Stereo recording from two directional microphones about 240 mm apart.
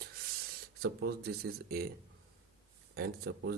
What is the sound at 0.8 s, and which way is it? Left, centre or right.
Speech, right.